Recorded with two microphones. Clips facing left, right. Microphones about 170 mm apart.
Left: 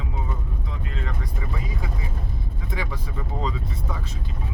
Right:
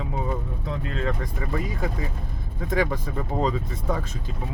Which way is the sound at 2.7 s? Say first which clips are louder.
Right 8 dB; 50° right (ahead or behind).